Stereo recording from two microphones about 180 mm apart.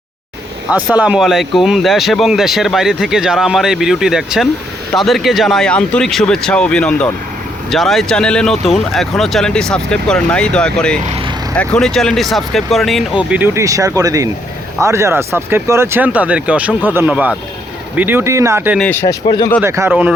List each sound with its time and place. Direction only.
0.9 s speech: 5° right (ahead or behind)
18.8 s speech: 10° left (ahead or behind)
19.0 s speech: 25° left (ahead or behind)
19.6 s speech: 15° right (ahead or behind)